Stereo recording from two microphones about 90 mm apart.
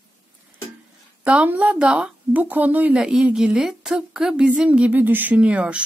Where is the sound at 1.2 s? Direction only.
15° right (ahead or behind).